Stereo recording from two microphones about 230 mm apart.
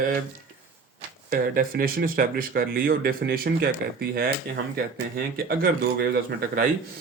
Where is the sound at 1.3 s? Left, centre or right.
Right.